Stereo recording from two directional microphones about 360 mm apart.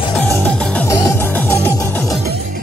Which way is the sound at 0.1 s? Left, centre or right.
Centre.